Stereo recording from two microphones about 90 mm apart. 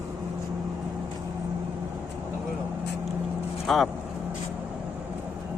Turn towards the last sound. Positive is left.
turn(degrees=0)  # may be behind; listen again after turning